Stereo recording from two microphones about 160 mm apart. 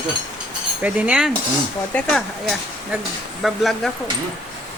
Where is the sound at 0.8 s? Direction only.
10° right (ahead or behind).